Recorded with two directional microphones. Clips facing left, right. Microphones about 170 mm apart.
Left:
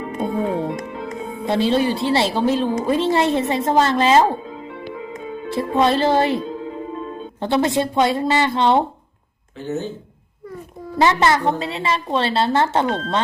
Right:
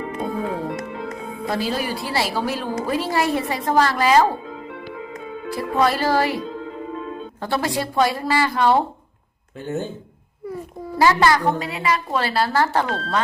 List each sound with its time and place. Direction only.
0.2 s a woman's voice: 25° left (ahead or behind)
5.5 s a woman's voice: 25° left (ahead or behind)
7.4 s a woman's voice: 20° left (ahead or behind)
10.9 s a woman's voice: 20° left (ahead or behind)